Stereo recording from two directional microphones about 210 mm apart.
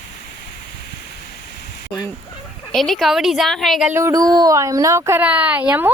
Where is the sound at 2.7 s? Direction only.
Centre (ahead or behind).